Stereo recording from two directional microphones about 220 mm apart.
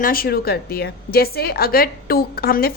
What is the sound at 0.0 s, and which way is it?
A woman's voice, 40° left (ahead or behind).